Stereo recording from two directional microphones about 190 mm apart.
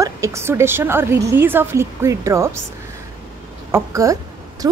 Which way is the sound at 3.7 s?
15° right (ahead or behind).